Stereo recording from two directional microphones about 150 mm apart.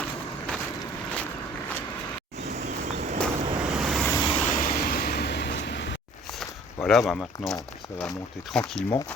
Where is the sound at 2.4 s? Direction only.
50° right (ahead or behind).